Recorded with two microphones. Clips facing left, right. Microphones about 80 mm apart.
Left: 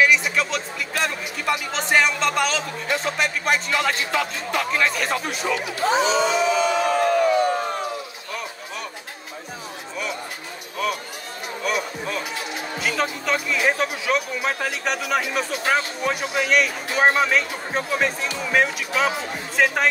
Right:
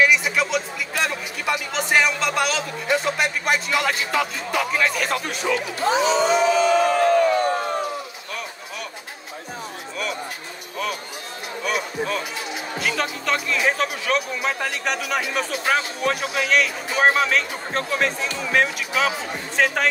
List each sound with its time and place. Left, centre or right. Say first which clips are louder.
0.0 s speech: even; centre
6.2 s crowd: right 2 dB; right
7.1 s a sound: right 1 dB; right
11.6 s speech: right 1 dB; centre